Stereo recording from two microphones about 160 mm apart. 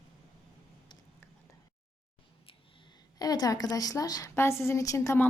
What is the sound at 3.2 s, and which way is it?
A woman's voice, 25° left (ahead or behind).